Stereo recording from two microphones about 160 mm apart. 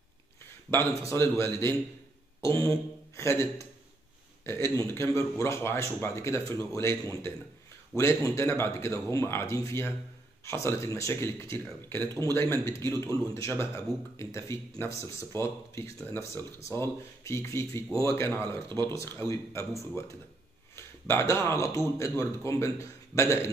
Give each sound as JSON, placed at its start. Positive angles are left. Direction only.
{"t": 0.7, "sound": "speech", "side_deg": 15}
{"t": 4.7, "sound": "speech", "side_deg": 20}